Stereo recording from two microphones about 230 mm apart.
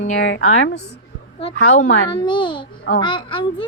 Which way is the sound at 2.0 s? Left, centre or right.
Left.